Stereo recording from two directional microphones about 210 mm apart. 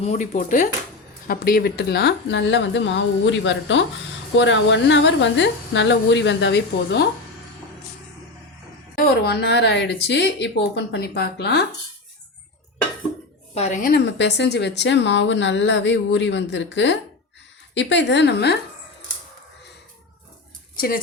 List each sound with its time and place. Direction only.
0.0 s speech: 35° left (ahead or behind); by 7.1 s 55° left (ahead or behind)
9.0 s a woman's voice: 50° left (ahead or behind)
13.5 s speech: 35° left (ahead or behind)
14.2 s speech: 55° left (ahead or behind)
20.7 s speech: 45° left (ahead or behind)